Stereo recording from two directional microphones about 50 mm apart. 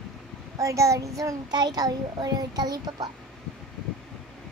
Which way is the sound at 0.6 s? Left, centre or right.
Right.